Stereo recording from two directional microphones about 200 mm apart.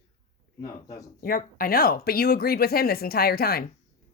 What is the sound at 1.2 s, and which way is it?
Speech, 45° left (ahead or behind).